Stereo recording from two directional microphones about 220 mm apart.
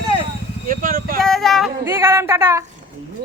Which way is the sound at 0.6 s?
40° right (ahead or behind).